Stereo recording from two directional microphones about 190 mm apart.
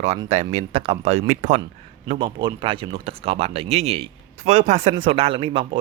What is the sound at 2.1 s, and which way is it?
Speech, 25° right (ahead or behind).